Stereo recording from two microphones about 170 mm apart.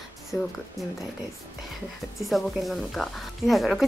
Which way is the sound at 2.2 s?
Centre (ahead or behind).